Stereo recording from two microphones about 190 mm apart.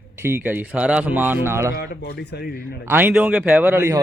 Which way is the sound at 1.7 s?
55° left (ahead or behind).